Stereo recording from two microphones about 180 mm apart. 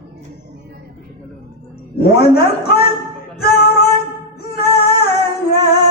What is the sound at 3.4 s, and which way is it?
Music, 60° left (ahead or behind).